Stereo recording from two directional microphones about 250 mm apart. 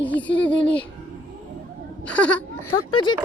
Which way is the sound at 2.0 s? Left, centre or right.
Centre.